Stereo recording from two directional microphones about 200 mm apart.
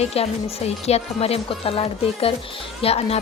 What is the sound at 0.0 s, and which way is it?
A woman's voice, 30° left (ahead or behind).